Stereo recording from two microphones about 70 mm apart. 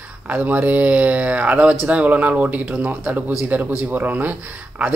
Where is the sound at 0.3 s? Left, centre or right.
Right.